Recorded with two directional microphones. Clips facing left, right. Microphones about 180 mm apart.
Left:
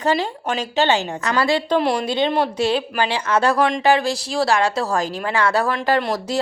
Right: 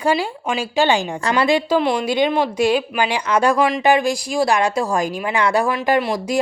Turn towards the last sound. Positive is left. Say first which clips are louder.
# right 2 dB
turn(degrees=-10)  # may be behind; listen again after turning